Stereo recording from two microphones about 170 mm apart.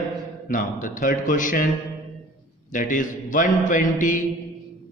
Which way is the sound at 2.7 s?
50° left (ahead or behind).